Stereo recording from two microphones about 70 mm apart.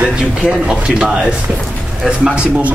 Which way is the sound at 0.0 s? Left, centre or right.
Centre.